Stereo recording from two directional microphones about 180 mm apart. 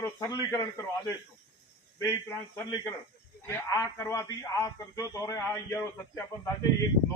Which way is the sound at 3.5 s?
15° left (ahead or behind).